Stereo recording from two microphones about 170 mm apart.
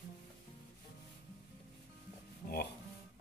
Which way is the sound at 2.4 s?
55° left (ahead or behind).